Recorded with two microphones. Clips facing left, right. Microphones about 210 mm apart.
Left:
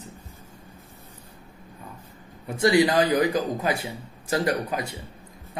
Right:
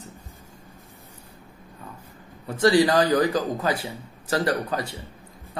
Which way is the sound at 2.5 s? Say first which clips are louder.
Right 1 dB; 25° left (ahead or behind).